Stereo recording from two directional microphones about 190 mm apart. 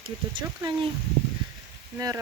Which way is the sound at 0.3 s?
25° right (ahead or behind).